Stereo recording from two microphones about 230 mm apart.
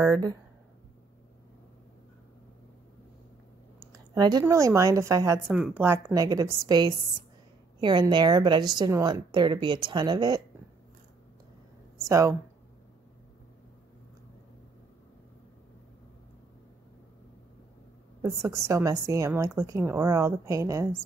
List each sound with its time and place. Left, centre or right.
0.1 s a woman's voice: centre
4.1 s a woman's voice: centre
12.0 s a woman's voice: centre
18.2 s a woman's voice: centre